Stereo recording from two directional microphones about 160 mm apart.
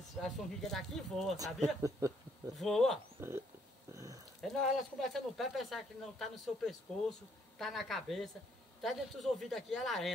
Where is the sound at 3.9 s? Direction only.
20° right (ahead or behind).